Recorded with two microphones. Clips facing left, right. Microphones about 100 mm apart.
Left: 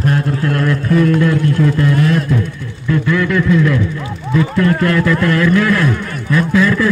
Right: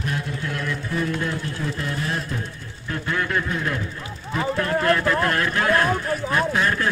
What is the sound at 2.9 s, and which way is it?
Speech, 90° left.